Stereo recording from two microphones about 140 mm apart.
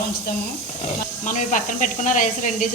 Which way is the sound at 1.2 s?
65° left (ahead or behind).